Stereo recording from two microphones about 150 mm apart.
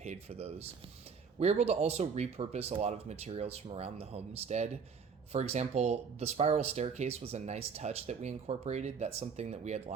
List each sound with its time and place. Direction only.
0.0 s speech: 45° right (ahead or behind)